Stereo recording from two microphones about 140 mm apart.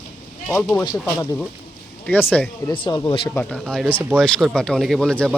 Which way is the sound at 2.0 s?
10° left (ahead or behind).